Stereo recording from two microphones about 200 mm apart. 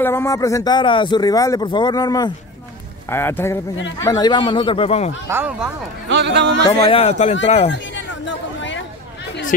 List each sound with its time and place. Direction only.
0.0 s a man's voice: 10° left (ahead or behind); by 5.1 s 30° left (ahead or behind)
5.3 s speech: 10° right (ahead or behind)
6.0 s speech: 60° right (ahead or behind)
6.7 s speech: 20° left (ahead or behind)
7.0 s a man's voice: 30° left (ahead or behind)
7.7 s chatter: 65° left (ahead or behind)